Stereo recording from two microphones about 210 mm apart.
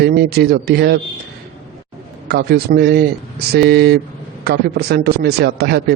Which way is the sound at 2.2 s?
50° right (ahead or behind).